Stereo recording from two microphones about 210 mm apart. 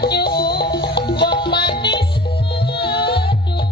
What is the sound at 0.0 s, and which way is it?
Music, 50° left (ahead or behind).